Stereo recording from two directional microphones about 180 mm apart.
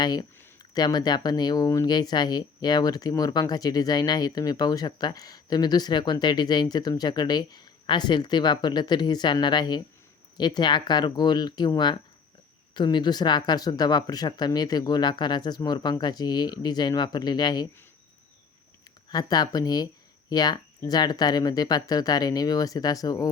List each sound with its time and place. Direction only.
0.0 s speech: 20° left (ahead or behind)
19.0 s speech: 20° left (ahead or behind)